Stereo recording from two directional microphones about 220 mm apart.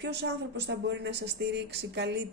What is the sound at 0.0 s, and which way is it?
Speech, 50° right (ahead or behind).